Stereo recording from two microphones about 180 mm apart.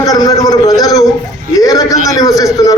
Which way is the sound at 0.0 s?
20° left (ahead or behind).